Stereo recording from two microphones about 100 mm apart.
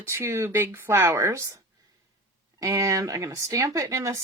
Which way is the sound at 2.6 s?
30° right (ahead or behind).